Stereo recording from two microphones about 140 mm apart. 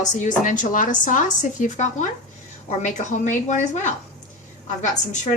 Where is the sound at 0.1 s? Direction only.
65° left (ahead or behind).